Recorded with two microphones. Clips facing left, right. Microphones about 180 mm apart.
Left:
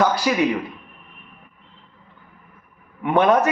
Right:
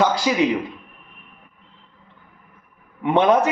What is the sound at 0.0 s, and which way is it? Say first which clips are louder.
Speech: even; 20° right (ahead or behind).